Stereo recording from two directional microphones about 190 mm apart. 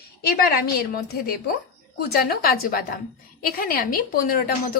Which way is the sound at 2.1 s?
50° left (ahead or behind).